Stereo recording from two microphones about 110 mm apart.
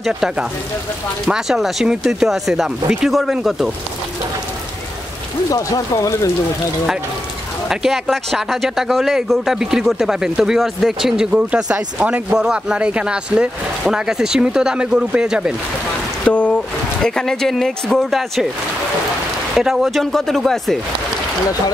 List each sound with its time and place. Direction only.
0.0 s speech: 5° right (ahead or behind)
5.5 s speech: 30° left (ahead or behind)
7.6 s speech: 5° right (ahead or behind)
16.3 s a sound: 10° left (ahead or behind)
17.0 s speech: 5° left (ahead or behind)
19.5 s speech: 5° right (ahead or behind)